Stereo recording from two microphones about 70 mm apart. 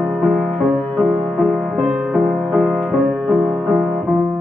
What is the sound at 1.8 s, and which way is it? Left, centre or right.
Music, centre.